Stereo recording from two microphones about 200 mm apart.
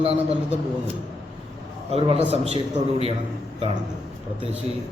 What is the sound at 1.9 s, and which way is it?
Speech, 30° right (ahead or behind).